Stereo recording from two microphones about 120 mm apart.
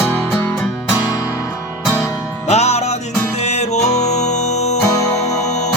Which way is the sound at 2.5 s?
65° left (ahead or behind).